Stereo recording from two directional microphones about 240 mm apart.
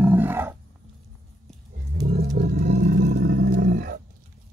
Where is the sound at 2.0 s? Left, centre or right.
Right.